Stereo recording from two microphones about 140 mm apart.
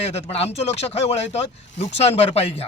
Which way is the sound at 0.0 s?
45° left (ahead or behind).